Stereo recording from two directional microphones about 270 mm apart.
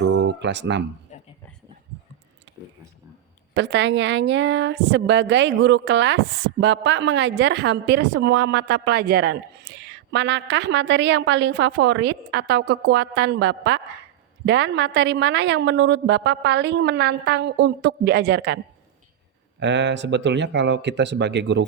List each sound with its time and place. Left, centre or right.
0.0 s speech: right
1.1 s a sound: left
3.5 s a woman's voice: right